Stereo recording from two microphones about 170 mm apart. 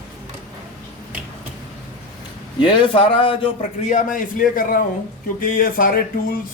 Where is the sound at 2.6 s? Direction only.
30° left (ahead or behind).